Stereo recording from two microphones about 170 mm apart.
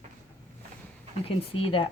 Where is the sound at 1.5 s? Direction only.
30° left (ahead or behind).